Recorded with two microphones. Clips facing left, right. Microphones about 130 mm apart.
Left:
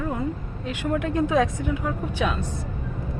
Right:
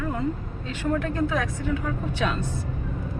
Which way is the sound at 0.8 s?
15° left (ahead or behind).